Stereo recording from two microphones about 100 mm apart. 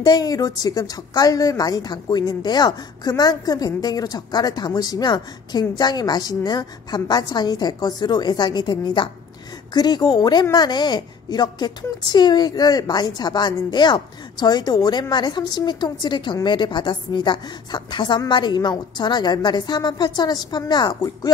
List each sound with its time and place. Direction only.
0.0 s a woman's voice: 40° left (ahead or behind)